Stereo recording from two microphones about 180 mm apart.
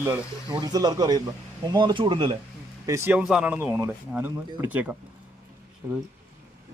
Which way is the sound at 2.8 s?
15° right (ahead or behind).